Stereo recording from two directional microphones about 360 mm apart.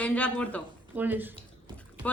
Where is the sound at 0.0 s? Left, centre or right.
Centre.